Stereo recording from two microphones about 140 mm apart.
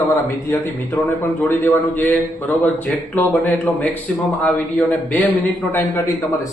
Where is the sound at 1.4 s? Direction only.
15° left (ahead or behind).